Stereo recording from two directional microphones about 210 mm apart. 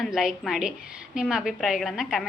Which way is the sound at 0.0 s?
Centre (ahead or behind).